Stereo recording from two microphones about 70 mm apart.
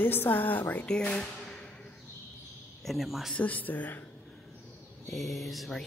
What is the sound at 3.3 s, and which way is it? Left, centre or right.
Speech, left.